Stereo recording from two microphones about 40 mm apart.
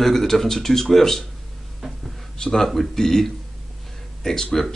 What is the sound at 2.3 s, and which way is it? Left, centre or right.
Speech, centre.